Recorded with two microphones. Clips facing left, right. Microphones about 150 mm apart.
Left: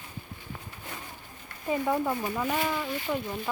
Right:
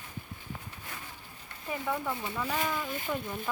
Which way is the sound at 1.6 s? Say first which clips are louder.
Left 6 dB; 20° left (ahead or behind).